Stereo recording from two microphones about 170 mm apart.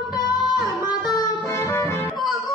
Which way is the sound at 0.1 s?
25° left (ahead or behind).